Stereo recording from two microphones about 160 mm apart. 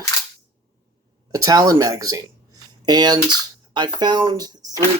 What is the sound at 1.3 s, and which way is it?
Speech, 25° right (ahead or behind).